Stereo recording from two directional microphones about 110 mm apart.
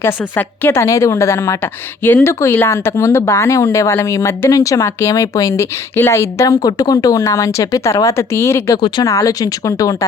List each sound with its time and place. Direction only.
0.0 s a woman's voice: 20° left (ahead or behind)